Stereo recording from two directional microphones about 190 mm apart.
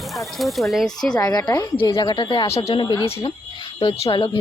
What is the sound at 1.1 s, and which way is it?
Speech, 20° left (ahead or behind).